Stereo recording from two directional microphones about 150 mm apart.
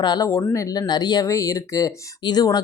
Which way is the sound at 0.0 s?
25° left (ahead or behind).